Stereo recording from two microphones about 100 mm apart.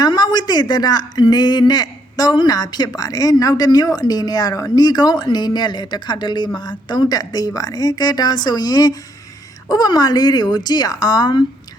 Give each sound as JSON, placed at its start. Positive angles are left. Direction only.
{"t": 0.0, "sound": "a woman's voice", "side_deg": 45}